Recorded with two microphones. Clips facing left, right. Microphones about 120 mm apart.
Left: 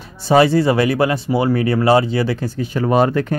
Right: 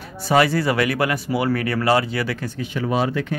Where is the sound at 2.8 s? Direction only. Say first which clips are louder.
Left 7 dB; 50° left (ahead or behind).